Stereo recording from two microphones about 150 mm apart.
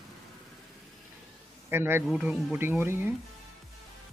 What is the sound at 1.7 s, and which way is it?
Speech, 15° right (ahead or behind).